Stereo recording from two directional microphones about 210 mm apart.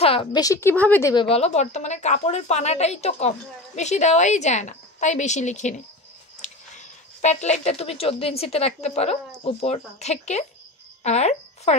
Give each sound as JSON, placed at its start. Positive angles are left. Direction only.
{"t": 0.0, "sound": "a woman's voice", "side_deg": 25}
{"t": 1.3, "sound": "a woman's voice", "side_deg": 30}